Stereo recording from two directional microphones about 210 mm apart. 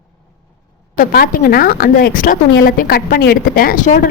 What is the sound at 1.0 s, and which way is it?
A woman's voice, 45° left (ahead or behind).